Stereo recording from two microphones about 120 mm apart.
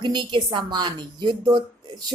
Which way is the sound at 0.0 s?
40° right (ahead or behind).